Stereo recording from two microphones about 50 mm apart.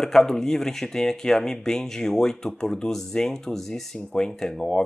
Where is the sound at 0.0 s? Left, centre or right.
Centre.